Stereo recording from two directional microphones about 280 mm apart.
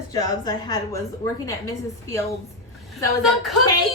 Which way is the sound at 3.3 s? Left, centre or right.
Centre.